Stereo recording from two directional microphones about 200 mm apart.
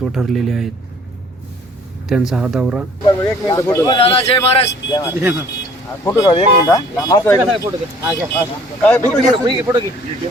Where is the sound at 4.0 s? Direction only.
30° left (ahead or behind).